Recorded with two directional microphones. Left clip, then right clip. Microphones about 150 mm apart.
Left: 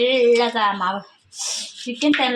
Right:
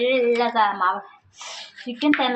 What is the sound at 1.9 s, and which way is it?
Speech, 40° left (ahead or behind).